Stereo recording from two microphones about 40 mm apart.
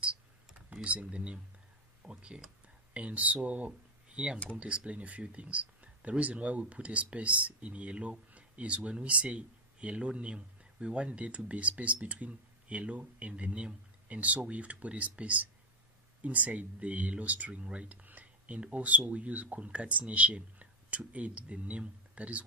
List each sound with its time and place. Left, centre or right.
0.8 s speech: right
2.0 s speech: right
4.1 s speech: right
4.6 s speech: right